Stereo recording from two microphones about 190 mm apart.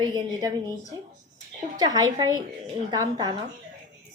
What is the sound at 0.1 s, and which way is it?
Speech, 20° right (ahead or behind).